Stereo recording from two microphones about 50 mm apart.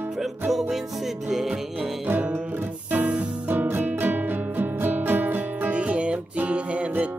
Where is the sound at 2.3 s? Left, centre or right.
Right.